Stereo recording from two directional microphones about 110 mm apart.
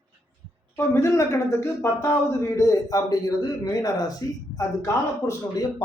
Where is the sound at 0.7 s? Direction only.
25° left (ahead or behind).